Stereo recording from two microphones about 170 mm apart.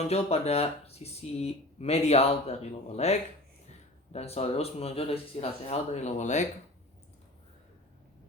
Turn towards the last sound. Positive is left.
turn(degrees=45)  # may be behind; listen again after turning